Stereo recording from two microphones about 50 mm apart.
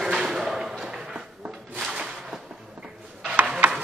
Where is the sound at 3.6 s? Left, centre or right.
Right.